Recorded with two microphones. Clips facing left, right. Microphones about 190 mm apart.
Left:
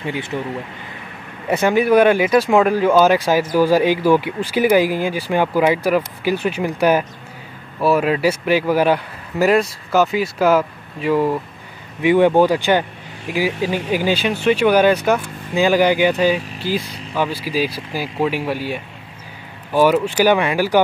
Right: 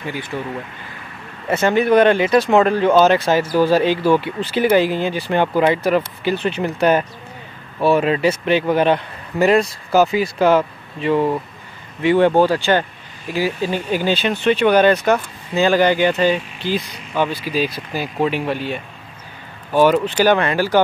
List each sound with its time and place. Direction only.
0.0 s speech: 25° left (ahead or behind)
1.5 s a man's voice: 10° left (ahead or behind)